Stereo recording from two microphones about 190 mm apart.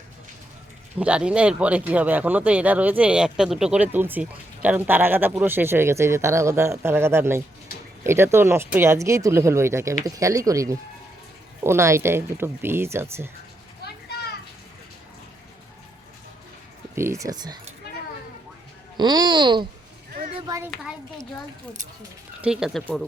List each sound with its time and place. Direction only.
0.9 s speech: 5° right (ahead or behind)
13.8 s children playing: 60° left (ahead or behind)
16.9 s speech: 15° right (ahead or behind)
18.9 s a child's voice: 20° right (ahead or behind)
22.4 s speech: 5° right (ahead or behind)